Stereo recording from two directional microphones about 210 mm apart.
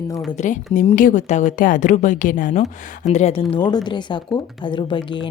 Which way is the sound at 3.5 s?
20° left (ahead or behind).